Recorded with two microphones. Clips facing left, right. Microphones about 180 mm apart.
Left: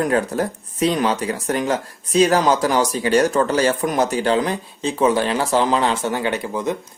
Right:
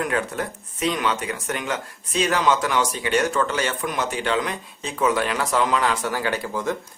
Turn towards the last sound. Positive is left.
turn(degrees=20)  # may be behind; listen again after turning